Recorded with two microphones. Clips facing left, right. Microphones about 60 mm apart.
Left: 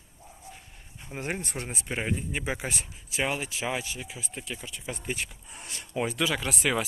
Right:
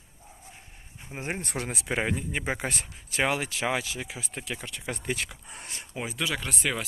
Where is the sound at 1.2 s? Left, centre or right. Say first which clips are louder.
Left 1 dB; right.